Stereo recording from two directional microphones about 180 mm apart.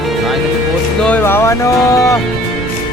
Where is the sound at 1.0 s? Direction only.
10° left (ahead or behind).